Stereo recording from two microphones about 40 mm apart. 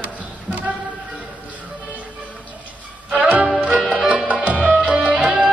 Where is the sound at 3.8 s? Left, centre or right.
Centre.